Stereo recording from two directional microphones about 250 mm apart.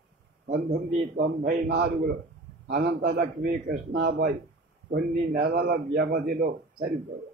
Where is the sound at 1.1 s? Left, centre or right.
Right.